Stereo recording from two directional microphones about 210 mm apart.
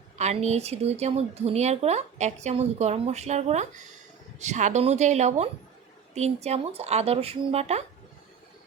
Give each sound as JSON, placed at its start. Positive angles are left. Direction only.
{"t": 0.2, "sound": "speech", "side_deg": -30}